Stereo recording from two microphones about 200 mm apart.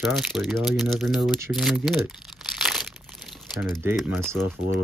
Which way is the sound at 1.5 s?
Centre (ahead or behind).